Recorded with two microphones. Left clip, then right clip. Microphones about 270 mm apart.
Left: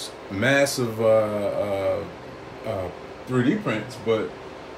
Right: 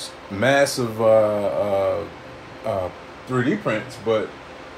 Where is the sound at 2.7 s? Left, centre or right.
Centre.